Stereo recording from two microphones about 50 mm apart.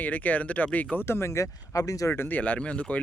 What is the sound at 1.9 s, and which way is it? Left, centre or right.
Speech, left.